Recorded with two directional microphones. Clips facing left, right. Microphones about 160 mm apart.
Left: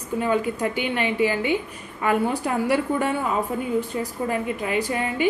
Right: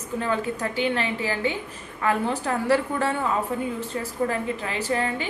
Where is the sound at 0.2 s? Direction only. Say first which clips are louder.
Left 4 dB; 15° left (ahead or behind).